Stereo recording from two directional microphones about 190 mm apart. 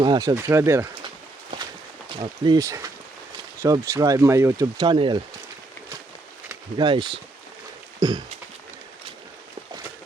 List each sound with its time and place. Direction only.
0.0 s speech: 20° right (ahead or behind)
2.0 s speech: 25° right (ahead or behind)
6.7 s speech: 25° right (ahead or behind)
7.9 s a sound: 20° right (ahead or behind)